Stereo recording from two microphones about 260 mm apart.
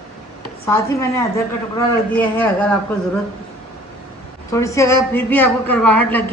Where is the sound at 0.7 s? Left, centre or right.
Centre.